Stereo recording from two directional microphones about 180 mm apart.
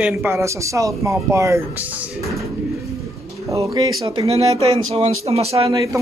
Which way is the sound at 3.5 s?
20° right (ahead or behind).